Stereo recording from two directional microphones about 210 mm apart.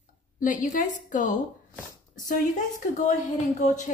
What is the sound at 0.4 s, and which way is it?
Speech, 40° left (ahead or behind).